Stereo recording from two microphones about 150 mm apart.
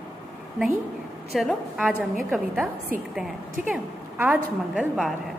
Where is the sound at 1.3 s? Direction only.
Centre (ahead or behind).